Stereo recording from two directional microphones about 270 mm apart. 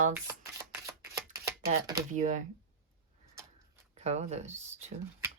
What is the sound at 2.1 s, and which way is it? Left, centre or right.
Speech, right.